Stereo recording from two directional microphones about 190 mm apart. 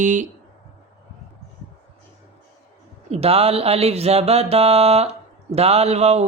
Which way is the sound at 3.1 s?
30° right (ahead or behind).